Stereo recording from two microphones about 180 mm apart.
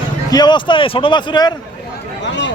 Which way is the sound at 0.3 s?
25° left (ahead or behind).